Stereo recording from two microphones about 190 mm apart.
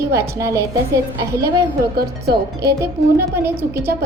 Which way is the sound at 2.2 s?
55° right (ahead or behind).